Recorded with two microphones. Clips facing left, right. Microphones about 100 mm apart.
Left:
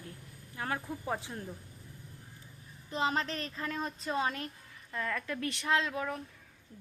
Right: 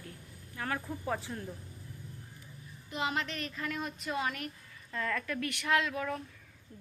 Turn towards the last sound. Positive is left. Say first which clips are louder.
# even
turn(degrees=20)  # may be behind; listen again after turning